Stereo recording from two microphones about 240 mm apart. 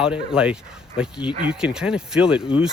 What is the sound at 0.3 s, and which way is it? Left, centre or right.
Speech, centre.